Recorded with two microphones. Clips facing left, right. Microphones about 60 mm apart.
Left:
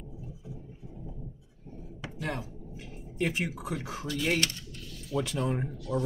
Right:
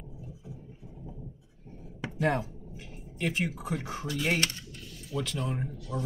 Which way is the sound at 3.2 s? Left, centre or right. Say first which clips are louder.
Even; centre.